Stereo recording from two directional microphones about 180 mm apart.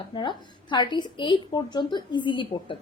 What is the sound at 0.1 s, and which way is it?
A woman's voice, 25° left (ahead or behind).